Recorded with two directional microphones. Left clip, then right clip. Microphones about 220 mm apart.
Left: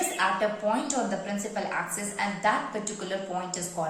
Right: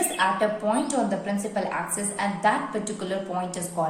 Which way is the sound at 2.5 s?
15° right (ahead or behind).